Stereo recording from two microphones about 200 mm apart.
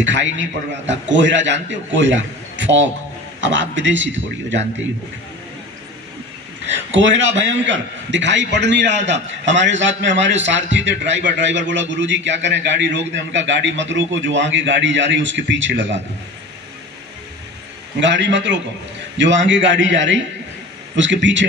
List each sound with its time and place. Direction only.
0.0 s a man's voice: 65° right (ahead or behind)
6.6 s a man's voice: 65° right (ahead or behind)
17.9 s a man's voice: 65° right (ahead or behind)